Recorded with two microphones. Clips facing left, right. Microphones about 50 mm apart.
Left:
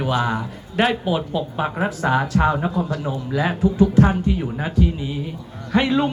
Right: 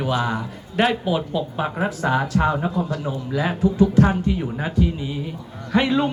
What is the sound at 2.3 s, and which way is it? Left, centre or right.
Speech, left.